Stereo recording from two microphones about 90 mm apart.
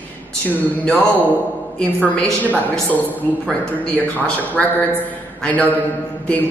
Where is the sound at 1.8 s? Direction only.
20° left (ahead or behind).